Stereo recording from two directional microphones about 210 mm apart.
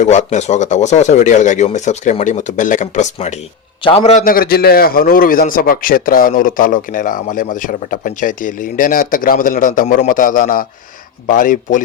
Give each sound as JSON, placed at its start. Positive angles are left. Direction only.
{"t": 0.0, "sound": "a man's voice", "side_deg": 35}